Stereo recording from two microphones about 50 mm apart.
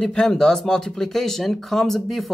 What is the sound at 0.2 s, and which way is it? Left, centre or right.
Speech, centre.